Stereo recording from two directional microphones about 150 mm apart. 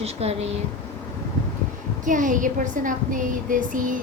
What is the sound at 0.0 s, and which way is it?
Speech, 45° right (ahead or behind).